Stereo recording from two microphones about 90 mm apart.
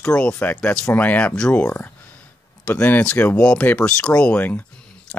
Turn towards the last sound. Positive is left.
turn(degrees=20)  # may be behind; listen again after turning